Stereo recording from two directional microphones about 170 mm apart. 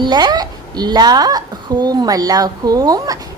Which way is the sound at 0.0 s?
25° right (ahead or behind).